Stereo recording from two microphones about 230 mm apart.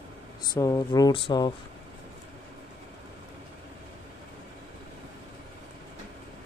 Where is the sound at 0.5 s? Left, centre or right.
Centre.